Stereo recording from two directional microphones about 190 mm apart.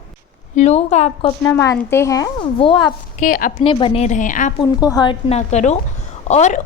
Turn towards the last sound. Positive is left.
turn(degrees=35)  # may be behind; listen again after turning